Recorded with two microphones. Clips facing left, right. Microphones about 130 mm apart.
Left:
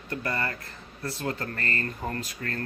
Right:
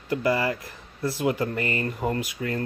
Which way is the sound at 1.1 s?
15° right (ahead or behind).